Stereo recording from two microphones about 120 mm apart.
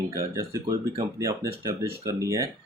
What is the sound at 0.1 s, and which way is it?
Speech, 25° right (ahead or behind).